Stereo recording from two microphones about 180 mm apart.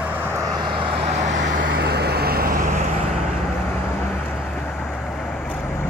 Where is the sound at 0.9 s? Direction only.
90° right.